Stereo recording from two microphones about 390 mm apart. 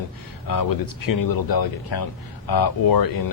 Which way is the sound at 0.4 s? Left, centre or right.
Left.